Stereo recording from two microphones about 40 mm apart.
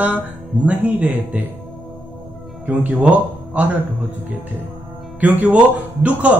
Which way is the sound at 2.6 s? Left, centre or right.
Right.